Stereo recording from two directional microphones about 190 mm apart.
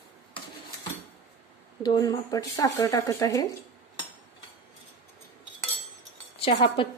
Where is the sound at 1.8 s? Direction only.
20° left (ahead or behind).